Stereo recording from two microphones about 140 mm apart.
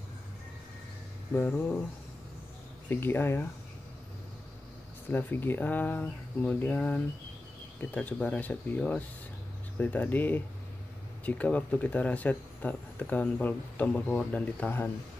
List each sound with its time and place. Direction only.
1.3 s speech: 15° left (ahead or behind)
2.9 s speech: 15° left (ahead or behind)
5.1 s speech: 15° left (ahead or behind)